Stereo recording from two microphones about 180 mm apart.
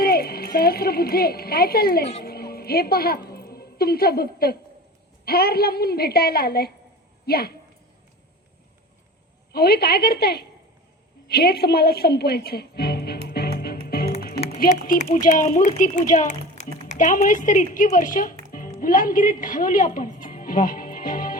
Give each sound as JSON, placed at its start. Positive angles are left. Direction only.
{"t": 0.0, "sound": "speech", "side_deg": 55}
{"t": 2.2, "sound": "a sound", "side_deg": 60}
{"t": 5.2, "sound": "speech", "side_deg": 60}
{"t": 9.5, "sound": "speech", "side_deg": 60}
{"t": 13.2, "sound": "music", "side_deg": 60}
{"t": 14.6, "sound": "a woman's voice", "side_deg": 45}